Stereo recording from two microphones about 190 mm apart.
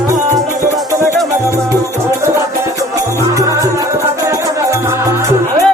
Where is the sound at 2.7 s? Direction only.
15° right (ahead or behind).